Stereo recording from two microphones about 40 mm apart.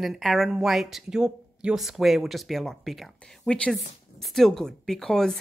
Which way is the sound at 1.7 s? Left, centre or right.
Centre.